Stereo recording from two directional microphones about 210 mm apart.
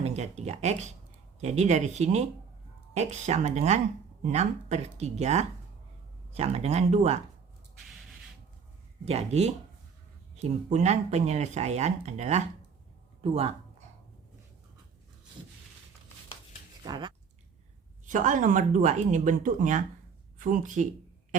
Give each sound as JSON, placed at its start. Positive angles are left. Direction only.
{"t": 0.0, "sound": "speech", "side_deg": -30}
{"t": 9.0, "sound": "speech", "side_deg": -30}
{"t": 16.8, "sound": "speech", "side_deg": -20}
{"t": 18.0, "sound": "speech", "side_deg": -35}